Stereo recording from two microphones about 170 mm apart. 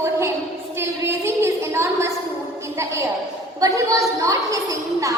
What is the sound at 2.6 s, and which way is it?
Music, 15° right (ahead or behind).